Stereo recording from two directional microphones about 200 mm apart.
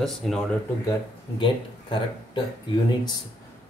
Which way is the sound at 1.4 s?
25° left (ahead or behind).